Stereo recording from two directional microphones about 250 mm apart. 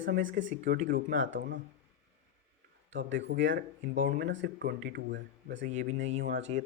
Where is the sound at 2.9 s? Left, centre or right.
Right.